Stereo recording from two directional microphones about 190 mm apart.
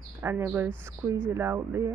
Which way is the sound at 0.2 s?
10° right (ahead or behind).